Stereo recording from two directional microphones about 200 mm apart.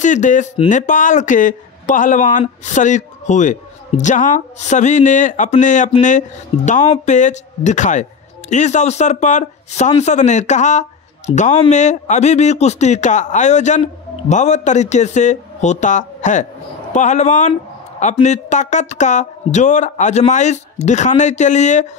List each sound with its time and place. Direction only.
0.0 s speech: 40° left (ahead or behind)